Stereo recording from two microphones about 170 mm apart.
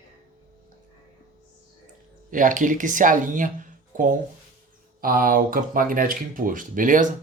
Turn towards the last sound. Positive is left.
turn(degrees=-50)  # may be behind; listen again after turning